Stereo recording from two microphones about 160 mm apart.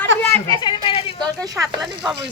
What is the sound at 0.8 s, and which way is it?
Speech, 35° left (ahead or behind).